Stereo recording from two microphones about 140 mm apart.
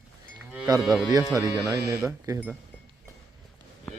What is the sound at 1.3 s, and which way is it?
Speech, 25° right (ahead or behind).